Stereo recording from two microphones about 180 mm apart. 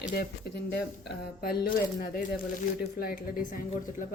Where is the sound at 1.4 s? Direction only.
55° left (ahead or behind).